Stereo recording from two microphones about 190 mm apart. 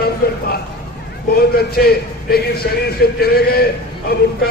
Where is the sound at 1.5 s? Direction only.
55° left (ahead or behind).